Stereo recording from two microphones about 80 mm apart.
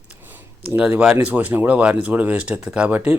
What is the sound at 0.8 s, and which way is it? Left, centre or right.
A man's voice, centre.